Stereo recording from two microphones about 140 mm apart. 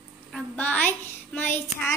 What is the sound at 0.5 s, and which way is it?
A woman's voice, 10° left (ahead or behind).